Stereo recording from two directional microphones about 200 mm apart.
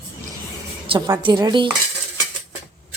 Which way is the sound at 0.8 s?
25° right (ahead or behind).